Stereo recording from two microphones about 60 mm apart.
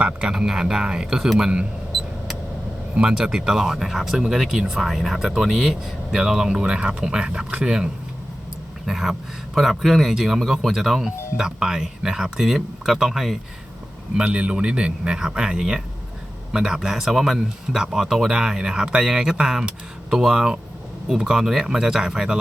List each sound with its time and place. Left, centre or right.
0.0 s speech: centre
2.9 s speech: centre
8.9 s speech: centre
14.2 s speech: centre